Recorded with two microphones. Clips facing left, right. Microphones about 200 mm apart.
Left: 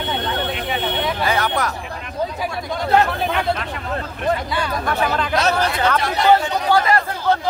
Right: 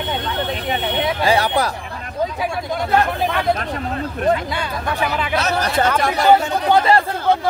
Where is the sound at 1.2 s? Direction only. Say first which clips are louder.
Right 4 dB; 30° right (ahead or behind).